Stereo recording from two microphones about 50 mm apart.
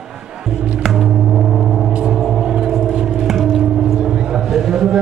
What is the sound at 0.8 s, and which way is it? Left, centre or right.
Gong, centre.